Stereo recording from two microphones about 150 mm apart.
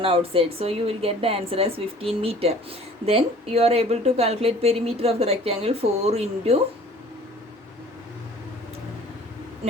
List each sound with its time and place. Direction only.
0.0 s a woman's voice: 40° right (ahead or behind)